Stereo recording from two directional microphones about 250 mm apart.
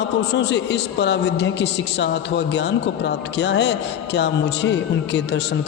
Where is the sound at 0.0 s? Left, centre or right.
Left.